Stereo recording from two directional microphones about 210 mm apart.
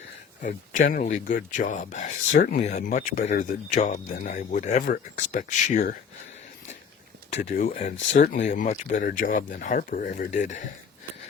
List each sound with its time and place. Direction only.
0.4 s speech: 40° left (ahead or behind)
7.3 s speech: 35° left (ahead or behind)